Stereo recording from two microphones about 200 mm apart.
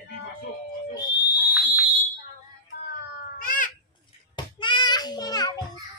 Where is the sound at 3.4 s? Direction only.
45° left (ahead or behind).